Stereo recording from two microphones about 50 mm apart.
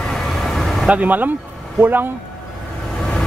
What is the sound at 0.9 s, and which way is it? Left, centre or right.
Speech, right.